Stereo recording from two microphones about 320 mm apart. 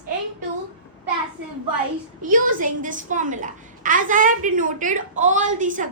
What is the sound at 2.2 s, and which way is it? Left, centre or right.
A child's voice, right.